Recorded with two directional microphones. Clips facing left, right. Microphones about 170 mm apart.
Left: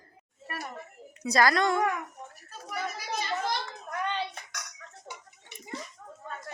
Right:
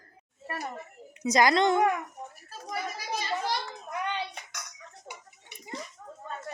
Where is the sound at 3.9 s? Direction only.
15° right (ahead or behind).